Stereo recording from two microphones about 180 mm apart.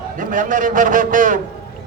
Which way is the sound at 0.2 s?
45° right (ahead or behind).